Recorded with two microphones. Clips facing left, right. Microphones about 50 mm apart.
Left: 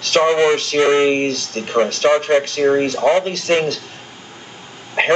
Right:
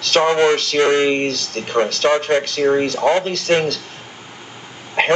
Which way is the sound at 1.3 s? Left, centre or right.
Left.